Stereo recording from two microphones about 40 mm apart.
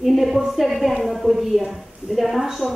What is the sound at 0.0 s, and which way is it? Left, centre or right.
A woman's voice, centre.